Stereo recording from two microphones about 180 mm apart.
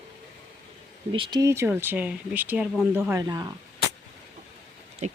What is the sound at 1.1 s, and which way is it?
Speech, 25° right (ahead or behind).